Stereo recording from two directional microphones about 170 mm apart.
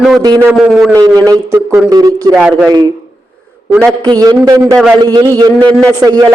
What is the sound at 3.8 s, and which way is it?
A man's voice, 20° right (ahead or behind).